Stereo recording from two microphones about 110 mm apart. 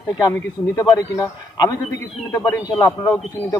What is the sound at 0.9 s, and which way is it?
Speech, 35° left (ahead or behind).